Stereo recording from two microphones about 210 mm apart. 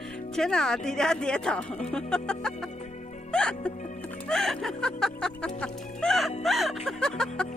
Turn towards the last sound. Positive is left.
turn(degrees=5)  # may be behind; listen again after turning